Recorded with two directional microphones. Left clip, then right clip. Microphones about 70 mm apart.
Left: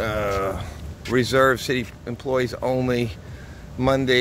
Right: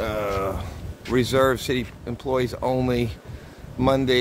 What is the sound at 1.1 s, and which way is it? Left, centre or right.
Speech, right.